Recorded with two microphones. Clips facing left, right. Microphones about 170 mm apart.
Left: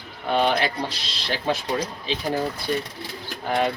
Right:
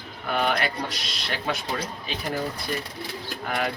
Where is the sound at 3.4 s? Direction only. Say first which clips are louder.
Left 5 dB; 30° left (ahead or behind).